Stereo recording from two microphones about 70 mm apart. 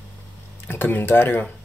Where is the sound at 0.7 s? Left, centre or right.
Left.